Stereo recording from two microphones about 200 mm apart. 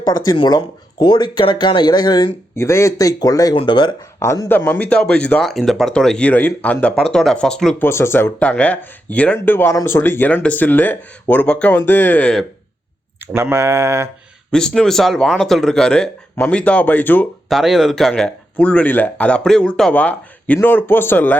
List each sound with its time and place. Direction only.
0.3 s speech: 20° left (ahead or behind); by 12.5 s 5° left (ahead or behind)
13.1 s speech: 10° right (ahead or behind)
14.5 s speech: 5° left (ahead or behind)